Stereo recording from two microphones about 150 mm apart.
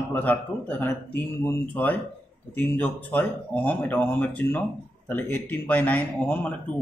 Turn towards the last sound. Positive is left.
turn(degrees=10)  # may be behind; listen again after turning